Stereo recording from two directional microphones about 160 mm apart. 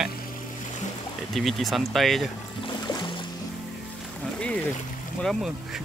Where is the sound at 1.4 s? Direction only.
Centre (ahead or behind).